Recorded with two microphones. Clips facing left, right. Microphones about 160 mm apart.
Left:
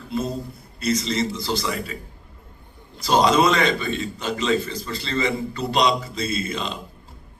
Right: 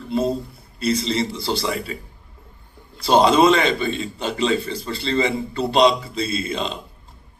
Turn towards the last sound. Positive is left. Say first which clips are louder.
# right 2 dB
turn(degrees=-30)  # may be behind; listen again after turning